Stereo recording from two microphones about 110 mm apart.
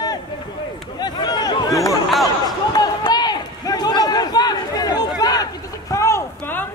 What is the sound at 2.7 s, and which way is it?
Run, 40° left (ahead or behind).